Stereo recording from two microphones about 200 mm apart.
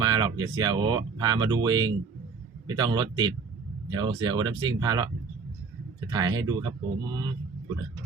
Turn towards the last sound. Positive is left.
turn(degrees=-20)  # may be behind; listen again after turning